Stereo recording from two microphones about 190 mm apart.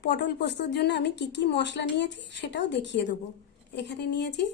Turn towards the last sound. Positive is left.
turn(degrees=60)  # may be behind; listen again after turning